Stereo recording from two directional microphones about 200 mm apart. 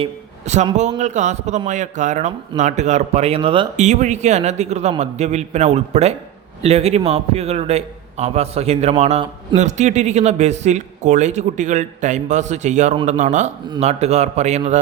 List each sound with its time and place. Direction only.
0.0 s speech: 35° right (ahead or behind)